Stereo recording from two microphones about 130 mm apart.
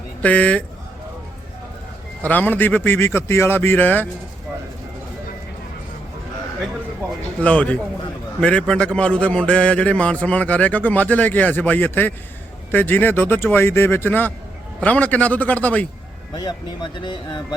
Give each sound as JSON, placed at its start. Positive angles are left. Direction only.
{"t": 0.2, "sound": "a man's voice", "side_deg": 10}
{"t": 2.2, "sound": "a man's voice", "side_deg": 15}
{"t": 7.4, "sound": "a man's voice", "side_deg": 10}
{"t": 16.3, "sound": "speech", "side_deg": 35}